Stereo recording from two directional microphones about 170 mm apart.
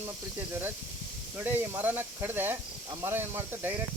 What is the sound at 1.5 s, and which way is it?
Speech, 10° right (ahead or behind).